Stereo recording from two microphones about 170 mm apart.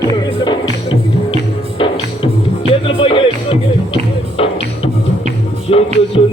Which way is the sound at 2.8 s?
30° left (ahead or behind).